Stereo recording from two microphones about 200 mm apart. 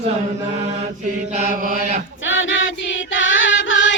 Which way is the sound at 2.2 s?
75° left (ahead or behind).